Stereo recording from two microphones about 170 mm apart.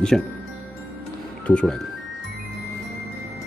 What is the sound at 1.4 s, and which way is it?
Speech, 5° left (ahead or behind).